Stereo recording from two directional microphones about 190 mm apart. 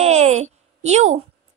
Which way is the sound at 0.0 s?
35° right (ahead or behind).